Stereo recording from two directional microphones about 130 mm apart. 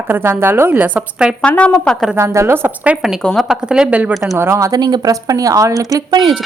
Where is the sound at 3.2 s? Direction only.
Centre (ahead or behind).